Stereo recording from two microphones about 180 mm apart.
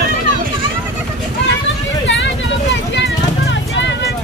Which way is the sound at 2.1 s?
90° left.